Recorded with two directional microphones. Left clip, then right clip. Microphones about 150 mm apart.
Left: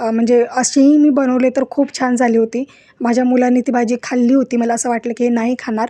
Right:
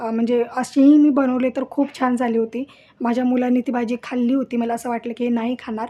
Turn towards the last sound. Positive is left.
turn(degrees=45)  # may be behind; listen again after turning